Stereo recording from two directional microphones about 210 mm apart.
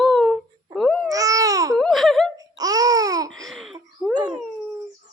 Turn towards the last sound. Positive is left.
turn(degrees=0)  # may be behind; listen again after turning